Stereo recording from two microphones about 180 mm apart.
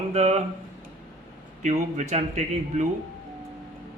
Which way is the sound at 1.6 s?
40° right (ahead or behind).